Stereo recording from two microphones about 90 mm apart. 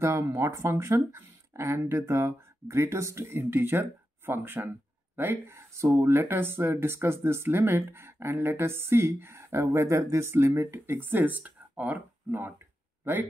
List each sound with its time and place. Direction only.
0.0 s speech: 30° right (ahead or behind)